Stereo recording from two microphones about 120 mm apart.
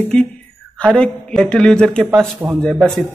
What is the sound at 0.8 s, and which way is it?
Speech, 5° left (ahead or behind).